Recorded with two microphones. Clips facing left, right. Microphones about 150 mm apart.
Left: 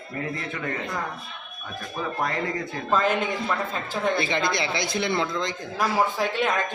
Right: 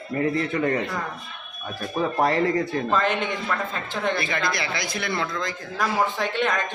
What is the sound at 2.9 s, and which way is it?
Speech, 5° left (ahead or behind).